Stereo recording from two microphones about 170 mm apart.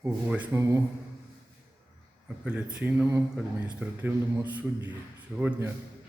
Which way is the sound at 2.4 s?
5° right (ahead or behind).